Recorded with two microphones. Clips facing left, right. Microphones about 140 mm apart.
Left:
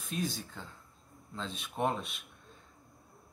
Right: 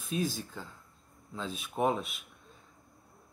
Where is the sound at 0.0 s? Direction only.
5° right (ahead or behind).